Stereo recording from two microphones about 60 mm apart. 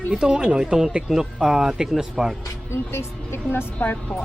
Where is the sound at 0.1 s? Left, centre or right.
Centre.